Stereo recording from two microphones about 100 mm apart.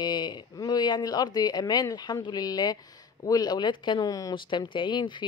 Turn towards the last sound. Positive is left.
turn(degrees=50)  # may be behind; listen again after turning